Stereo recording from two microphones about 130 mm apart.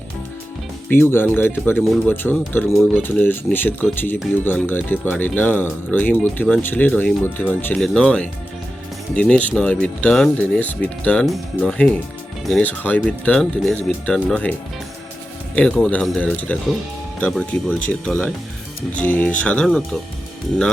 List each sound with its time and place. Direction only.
0.9 s speech: 15° left (ahead or behind)
15.5 s speech: 10° left (ahead or behind)